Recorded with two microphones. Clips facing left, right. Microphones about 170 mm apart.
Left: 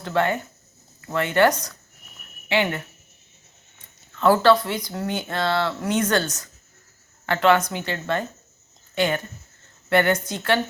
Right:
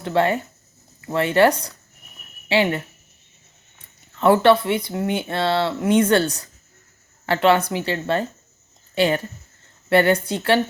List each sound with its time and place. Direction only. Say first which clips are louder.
0.0 s speech: right 3 dB; 25° right (ahead or behind)
4.2 s speech: right 2 dB; 25° right (ahead or behind)